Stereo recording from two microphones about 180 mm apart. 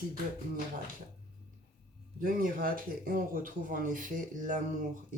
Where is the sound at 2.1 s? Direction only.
50° right (ahead or behind).